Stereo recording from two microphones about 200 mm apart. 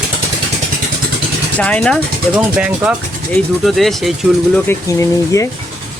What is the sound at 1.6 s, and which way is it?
Speech, 5° left (ahead or behind).